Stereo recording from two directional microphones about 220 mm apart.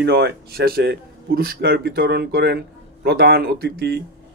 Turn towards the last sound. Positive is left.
turn(degrees=-45)  # may be behind; listen again after turning